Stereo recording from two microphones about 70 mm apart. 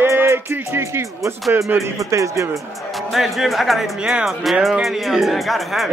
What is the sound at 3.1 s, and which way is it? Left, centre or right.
Speech, centre.